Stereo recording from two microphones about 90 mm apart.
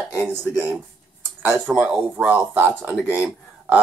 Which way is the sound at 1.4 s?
15° right (ahead or behind).